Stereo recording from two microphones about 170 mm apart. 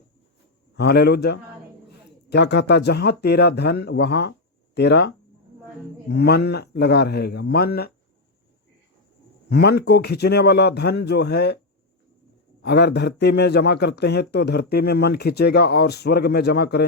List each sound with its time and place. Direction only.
0.8 s speech: 70° left (ahead or behind)
2.3 s speech: 85° left; by 7.9 s 65° left (ahead or behind)
9.5 s speech: 75° left (ahead or behind)
12.6 s speech: 75° left (ahead or behind)